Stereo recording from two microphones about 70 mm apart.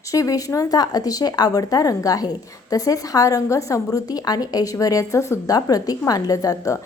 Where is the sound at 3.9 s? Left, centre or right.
Left.